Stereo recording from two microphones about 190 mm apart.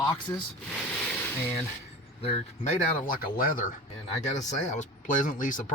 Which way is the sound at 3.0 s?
50° left (ahead or behind).